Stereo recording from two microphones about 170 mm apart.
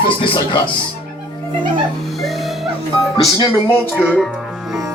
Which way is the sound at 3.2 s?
25° left (ahead or behind).